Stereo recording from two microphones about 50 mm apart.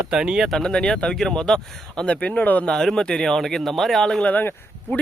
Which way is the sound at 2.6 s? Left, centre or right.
Centre.